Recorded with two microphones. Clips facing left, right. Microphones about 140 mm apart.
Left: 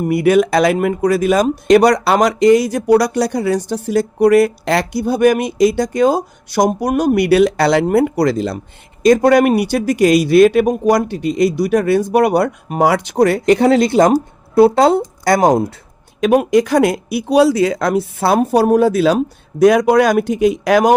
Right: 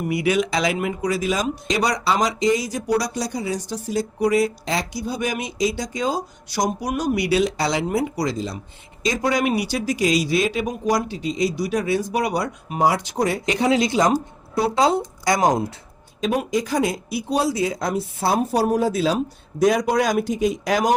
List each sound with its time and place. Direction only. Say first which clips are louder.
0.0 s speech: left 8 dB; 55° left (ahead or behind)
12.8 s speech: left 7 dB; 70° left (ahead or behind)